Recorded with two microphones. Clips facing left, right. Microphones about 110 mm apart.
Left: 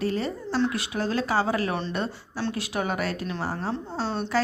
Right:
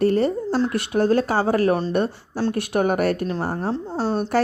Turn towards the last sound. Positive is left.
turn(degrees=-60)  # may be behind; listen again after turning